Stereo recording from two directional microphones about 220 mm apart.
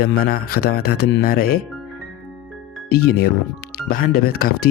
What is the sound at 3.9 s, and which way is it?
Speech, 40° left (ahead or behind).